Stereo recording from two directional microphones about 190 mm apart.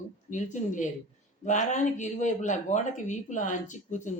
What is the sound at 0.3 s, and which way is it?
Speech, 40° left (ahead or behind).